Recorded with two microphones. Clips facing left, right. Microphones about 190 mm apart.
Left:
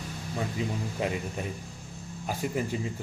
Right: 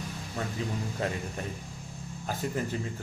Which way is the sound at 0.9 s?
15° left (ahead or behind).